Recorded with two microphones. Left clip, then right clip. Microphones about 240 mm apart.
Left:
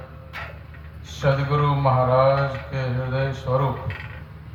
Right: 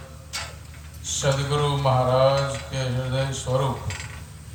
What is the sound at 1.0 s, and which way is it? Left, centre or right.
Mantra, right.